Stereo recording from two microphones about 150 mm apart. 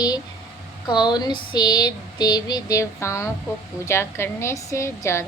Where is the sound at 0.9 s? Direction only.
30° left (ahead or behind).